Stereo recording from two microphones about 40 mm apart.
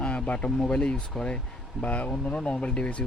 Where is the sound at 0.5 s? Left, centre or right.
Left.